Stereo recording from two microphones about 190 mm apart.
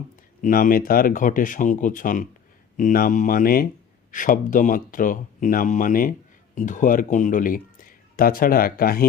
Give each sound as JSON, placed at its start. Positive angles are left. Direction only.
{"t": 0.4, "sound": "speech", "side_deg": 45}